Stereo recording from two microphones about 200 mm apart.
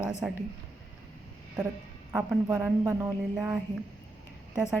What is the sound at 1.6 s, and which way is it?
A woman's voice, 5° right (ahead or behind).